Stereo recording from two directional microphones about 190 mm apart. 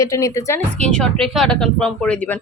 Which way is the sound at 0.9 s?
5° left (ahead or behind).